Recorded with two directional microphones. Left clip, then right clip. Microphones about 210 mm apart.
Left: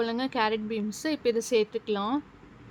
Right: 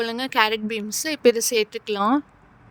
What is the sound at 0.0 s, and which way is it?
Speech, 35° right (ahead or behind).